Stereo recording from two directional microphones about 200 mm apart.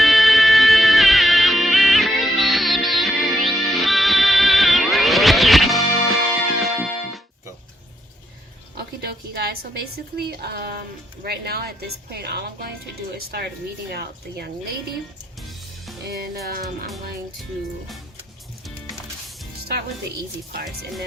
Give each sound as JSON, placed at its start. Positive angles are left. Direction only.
{"t": 0.0, "sound": "music", "side_deg": 0}
{"t": 8.7, "sound": "a sound", "side_deg": -55}
{"t": 10.2, "sound": "speech", "side_deg": -50}
{"t": 15.4, "sound": "music", "side_deg": 0}
{"t": 16.0, "sound": "speech", "side_deg": -50}